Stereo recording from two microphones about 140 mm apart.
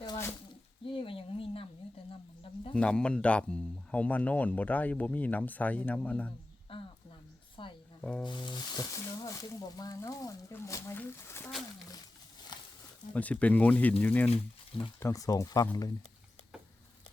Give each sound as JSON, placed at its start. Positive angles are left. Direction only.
{"t": 0.9, "sound": "a sound", "side_deg": 40}
{"t": 2.7, "sound": "speech", "side_deg": 5}
{"t": 6.7, "sound": "a sound", "side_deg": 40}
{"t": 7.6, "sound": "music", "side_deg": 35}
{"t": 8.2, "sound": "speech", "side_deg": 35}
{"t": 13.1, "sound": "speech", "side_deg": 10}